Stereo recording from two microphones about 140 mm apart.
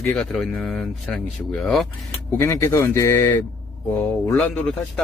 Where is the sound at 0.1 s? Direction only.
Centre (ahead or behind).